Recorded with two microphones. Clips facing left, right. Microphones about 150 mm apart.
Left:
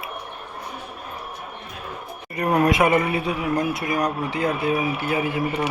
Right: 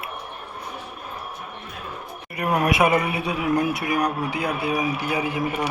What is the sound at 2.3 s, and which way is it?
A man's voice, 10° right (ahead or behind).